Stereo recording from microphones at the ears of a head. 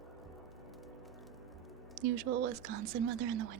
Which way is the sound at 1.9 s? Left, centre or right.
Right.